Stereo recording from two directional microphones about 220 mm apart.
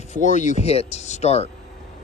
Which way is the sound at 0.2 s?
35° left (ahead or behind).